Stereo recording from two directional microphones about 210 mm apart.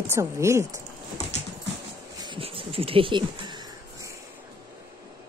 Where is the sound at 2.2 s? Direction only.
25° right (ahead or behind).